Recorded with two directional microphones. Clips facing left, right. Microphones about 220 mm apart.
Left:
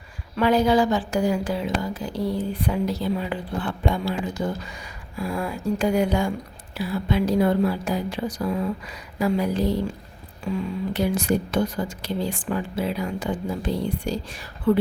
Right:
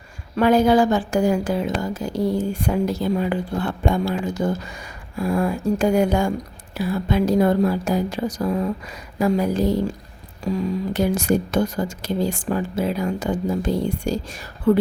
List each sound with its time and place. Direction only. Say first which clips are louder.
0.3 s a woman's voice: right 3 dB; 50° right (ahead or behind)